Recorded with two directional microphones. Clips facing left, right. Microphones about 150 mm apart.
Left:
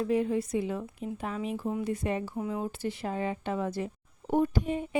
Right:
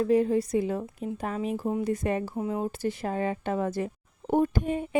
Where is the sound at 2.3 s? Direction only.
30° right (ahead or behind).